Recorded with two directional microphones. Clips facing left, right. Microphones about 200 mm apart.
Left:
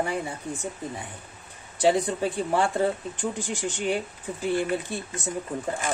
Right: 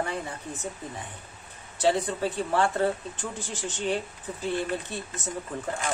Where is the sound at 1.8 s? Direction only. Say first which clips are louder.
Left 2 dB; 15° left (ahead or behind).